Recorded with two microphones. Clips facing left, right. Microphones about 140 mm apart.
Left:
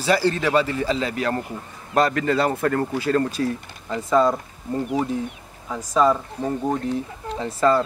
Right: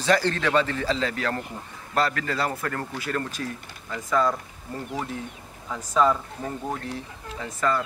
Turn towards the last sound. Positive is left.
turn(degrees=30)  # may be behind; listen again after turning